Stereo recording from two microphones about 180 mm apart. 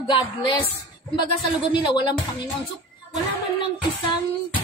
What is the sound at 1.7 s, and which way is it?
Speech, 25° left (ahead or behind).